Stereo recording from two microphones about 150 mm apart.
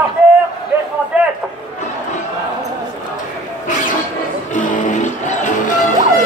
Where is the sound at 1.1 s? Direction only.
10° right (ahead or behind).